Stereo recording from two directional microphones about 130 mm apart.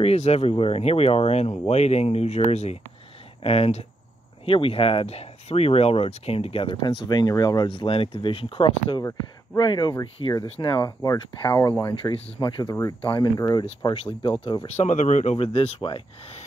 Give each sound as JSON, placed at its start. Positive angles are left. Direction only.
{"t": 0.0, "sound": "speech", "side_deg": 55}
{"t": 6.8, "sound": "speech", "side_deg": 30}
{"t": 10.4, "sound": "speech", "side_deg": 40}
{"t": 11.9, "sound": "speech", "side_deg": 40}
{"t": 13.4, "sound": "speech", "side_deg": 30}
{"t": 14.8, "sound": "speech", "side_deg": 70}
{"t": 15.3, "sound": "speech", "side_deg": 50}